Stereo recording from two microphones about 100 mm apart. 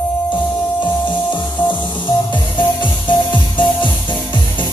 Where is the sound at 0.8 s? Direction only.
50° left (ahead or behind).